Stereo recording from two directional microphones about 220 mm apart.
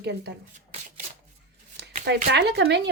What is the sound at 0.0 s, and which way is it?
Speech, 50° right (ahead or behind).